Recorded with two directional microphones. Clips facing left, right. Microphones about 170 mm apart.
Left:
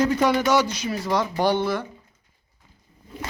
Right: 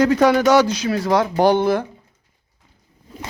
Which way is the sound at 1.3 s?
45° right (ahead or behind).